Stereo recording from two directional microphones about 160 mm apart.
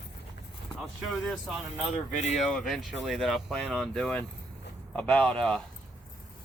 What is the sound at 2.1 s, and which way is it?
Speech, 45° left (ahead or behind).